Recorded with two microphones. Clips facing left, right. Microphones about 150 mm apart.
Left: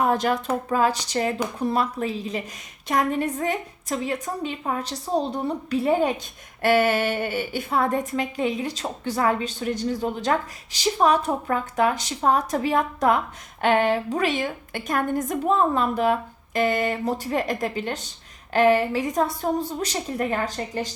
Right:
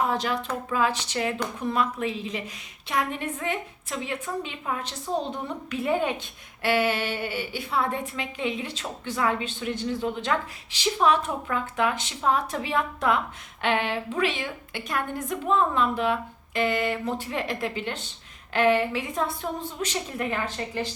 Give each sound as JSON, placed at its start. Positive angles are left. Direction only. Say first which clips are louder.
{"t": 0.1, "sound": "a woman's voice", "louder": "left 5 dB", "side_deg": 50}